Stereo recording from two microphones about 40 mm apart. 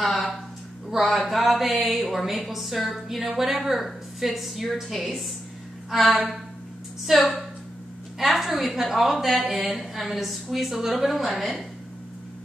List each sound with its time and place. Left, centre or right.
0.0 s a woman's voice: centre
5.9 s a sound: centre
7.1 s a woman's voice: centre